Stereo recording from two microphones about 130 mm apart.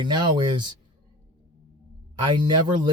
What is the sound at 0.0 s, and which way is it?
Speech, 35° right (ahead or behind).